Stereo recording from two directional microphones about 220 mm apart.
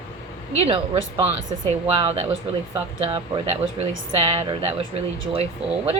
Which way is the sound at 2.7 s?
15° right (ahead or behind).